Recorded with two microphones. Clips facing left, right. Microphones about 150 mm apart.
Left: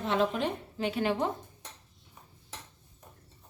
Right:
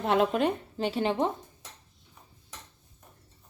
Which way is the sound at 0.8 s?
30° right (ahead or behind).